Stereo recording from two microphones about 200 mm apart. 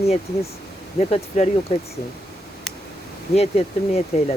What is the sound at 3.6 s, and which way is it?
Speech, 30° left (ahead or behind).